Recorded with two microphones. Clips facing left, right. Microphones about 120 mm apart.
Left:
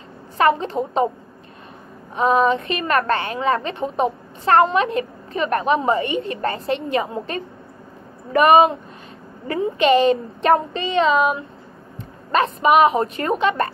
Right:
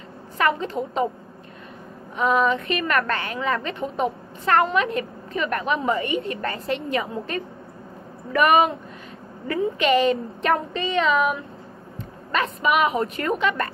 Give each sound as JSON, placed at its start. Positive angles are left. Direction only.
{"t": 0.4, "sound": "speech", "side_deg": 30}
{"t": 2.1, "sound": "a woman's voice", "side_deg": 30}